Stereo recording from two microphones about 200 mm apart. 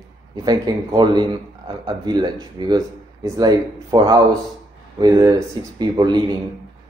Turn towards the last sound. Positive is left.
turn(degrees=-20)  # may be behind; listen again after turning